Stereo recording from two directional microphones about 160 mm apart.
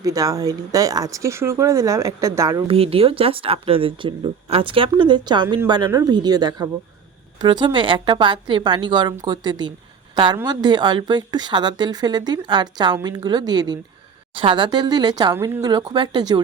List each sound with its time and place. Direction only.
0.0 s a woman's voice: 20° right (ahead or behind)
2.6 s a woman's voice: 35° right (ahead or behind)